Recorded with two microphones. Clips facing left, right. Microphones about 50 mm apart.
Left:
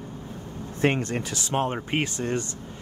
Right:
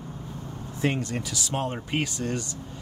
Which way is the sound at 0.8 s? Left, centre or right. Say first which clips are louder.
Left 3 dB; left.